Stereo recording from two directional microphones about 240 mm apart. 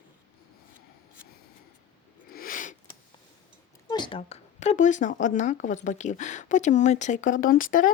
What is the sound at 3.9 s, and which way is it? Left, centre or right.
Speech, centre.